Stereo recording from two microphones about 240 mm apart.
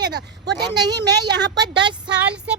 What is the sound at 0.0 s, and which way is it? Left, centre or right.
Speech, right.